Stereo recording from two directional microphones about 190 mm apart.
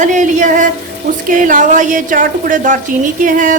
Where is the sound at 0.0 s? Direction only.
40° right (ahead or behind).